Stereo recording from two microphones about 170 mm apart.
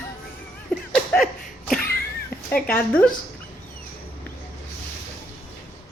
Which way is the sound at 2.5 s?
10° left (ahead or behind).